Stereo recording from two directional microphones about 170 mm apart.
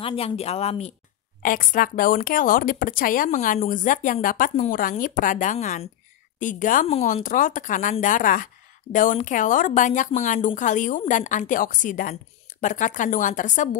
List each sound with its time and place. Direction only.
0.0 s speech: 35° left (ahead or behind)
1.4 s speech: 55° left (ahead or behind)
6.9 s speech: 40° left (ahead or behind)